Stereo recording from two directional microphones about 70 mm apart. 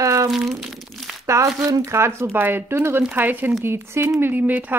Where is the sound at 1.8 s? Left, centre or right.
Right.